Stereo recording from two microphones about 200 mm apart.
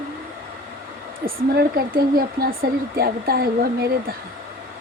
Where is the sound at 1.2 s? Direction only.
45° right (ahead or behind).